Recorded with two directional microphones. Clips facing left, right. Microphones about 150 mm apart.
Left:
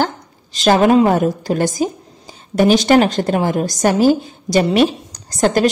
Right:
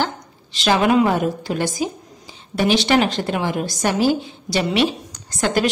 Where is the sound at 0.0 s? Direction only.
45° left (ahead or behind).